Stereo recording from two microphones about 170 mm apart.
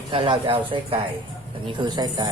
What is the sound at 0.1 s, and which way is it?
Speech, 30° right (ahead or behind).